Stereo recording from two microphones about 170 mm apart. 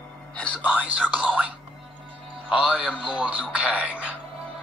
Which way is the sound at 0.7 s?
10° right (ahead or behind).